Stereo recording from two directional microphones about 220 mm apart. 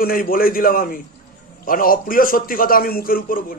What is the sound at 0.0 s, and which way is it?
A man's voice, 40° left (ahead or behind).